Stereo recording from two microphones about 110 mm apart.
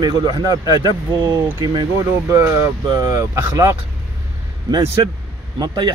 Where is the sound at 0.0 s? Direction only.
40° right (ahead or behind).